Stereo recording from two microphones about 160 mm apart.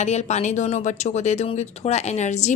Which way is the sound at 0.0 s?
45° left (ahead or behind).